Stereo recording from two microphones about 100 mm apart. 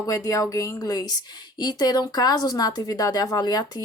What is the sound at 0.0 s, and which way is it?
Speech, 35° left (ahead or behind).